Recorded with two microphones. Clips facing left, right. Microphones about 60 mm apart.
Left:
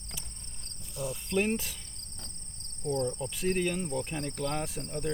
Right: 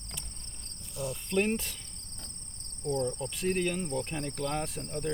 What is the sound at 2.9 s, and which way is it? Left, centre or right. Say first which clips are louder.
Cricket: even; right.